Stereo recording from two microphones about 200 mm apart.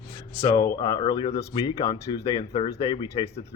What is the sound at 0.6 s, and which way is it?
Speech, 15° left (ahead or behind).